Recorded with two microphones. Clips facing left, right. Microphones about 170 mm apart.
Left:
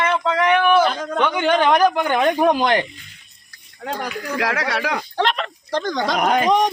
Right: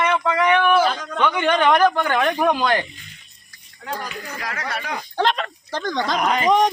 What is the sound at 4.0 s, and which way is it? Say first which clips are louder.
Speech: left 7 dB; 75° left (ahead or behind).